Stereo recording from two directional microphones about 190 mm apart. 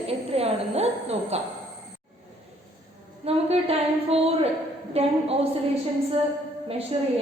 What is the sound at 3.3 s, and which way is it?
A woman's voice, 30° right (ahead or behind).